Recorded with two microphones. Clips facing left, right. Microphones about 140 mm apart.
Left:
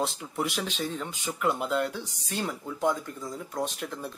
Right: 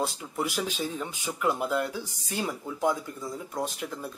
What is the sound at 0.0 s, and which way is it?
Speech, centre (ahead or behind).